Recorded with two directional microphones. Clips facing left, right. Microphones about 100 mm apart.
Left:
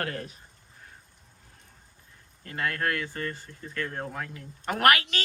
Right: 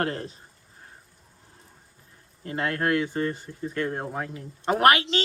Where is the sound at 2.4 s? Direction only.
25° right (ahead or behind).